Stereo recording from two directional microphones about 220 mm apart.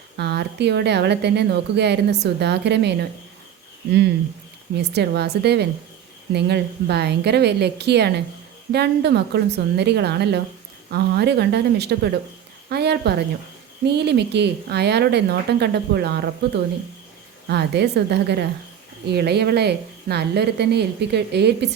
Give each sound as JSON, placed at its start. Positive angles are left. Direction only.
{"t": 0.2, "sound": "speech", "side_deg": -50}
{"t": 4.8, "sound": "speech", "side_deg": -50}
{"t": 17.5, "sound": "speech", "side_deg": -50}